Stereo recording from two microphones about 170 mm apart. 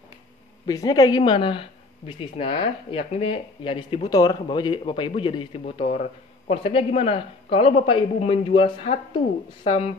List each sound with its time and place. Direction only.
0.7 s speech: 20° left (ahead or behind)